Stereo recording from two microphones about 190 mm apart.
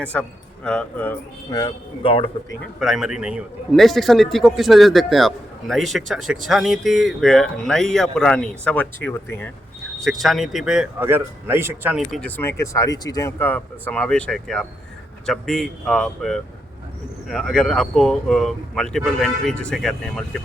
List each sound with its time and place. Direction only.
0.0 s speech: 5° left (ahead or behind)
1.5 s a man's voice: 20° left (ahead or behind)
2.7 s a man's voice: centre (ahead or behind)
10.0 s a man's voice: centre (ahead or behind)
12.4 s a man's voice: 15° left (ahead or behind)